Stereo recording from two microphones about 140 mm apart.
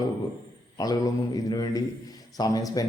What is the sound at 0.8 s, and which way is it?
A man's voice, 25° left (ahead or behind).